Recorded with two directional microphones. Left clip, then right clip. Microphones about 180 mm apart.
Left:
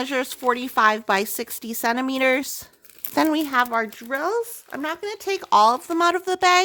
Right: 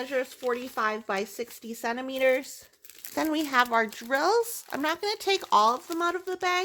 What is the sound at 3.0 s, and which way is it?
Speech, 30° left (ahead or behind).